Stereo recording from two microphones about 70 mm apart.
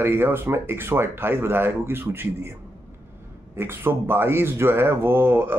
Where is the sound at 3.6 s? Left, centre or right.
Right.